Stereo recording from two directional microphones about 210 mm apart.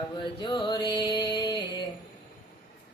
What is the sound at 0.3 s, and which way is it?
Music, 20° left (ahead or behind).